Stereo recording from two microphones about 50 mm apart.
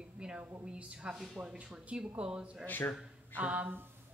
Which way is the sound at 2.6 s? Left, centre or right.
Left.